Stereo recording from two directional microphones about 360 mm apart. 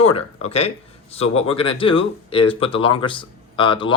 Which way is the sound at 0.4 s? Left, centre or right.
Centre.